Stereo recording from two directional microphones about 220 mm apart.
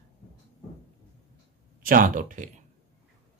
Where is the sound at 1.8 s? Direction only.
40° right (ahead or behind).